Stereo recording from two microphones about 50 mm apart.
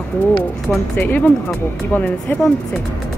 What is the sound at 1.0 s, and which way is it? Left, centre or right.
Speech, left.